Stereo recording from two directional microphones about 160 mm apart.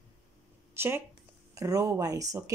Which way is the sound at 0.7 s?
15° right (ahead or behind).